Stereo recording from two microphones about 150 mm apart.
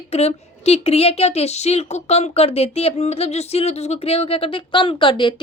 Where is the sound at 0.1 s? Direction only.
45° left (ahead or behind).